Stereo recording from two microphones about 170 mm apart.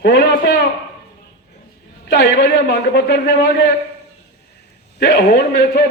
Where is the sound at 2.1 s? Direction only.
90° left.